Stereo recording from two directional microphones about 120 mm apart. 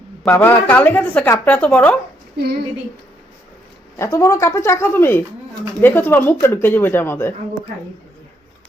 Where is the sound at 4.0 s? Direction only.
25° left (ahead or behind).